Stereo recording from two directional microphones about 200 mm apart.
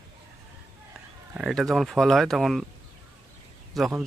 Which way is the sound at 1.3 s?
Centre (ahead or behind).